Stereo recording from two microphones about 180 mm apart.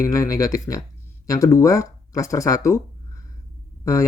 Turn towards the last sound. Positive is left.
turn(degrees=15)  # may be behind; listen again after turning